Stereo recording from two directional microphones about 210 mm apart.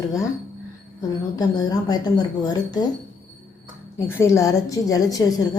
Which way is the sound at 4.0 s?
10° left (ahead or behind).